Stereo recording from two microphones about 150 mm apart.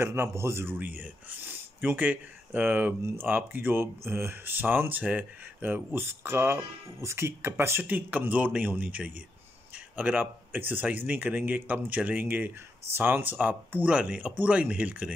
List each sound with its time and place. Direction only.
0.0 s a man's voice: 15° right (ahead or behind)